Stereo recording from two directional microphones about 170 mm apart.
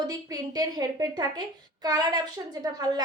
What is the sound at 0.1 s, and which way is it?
A woman's voice, 20° right (ahead or behind).